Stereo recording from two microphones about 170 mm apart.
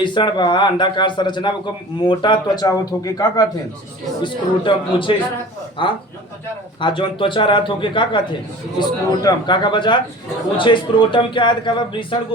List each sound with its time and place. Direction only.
0.0 s a man's voice: 25° left (ahead or behind)